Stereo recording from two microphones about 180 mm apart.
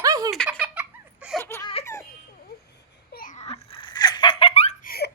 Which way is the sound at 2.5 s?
60° left (ahead or behind).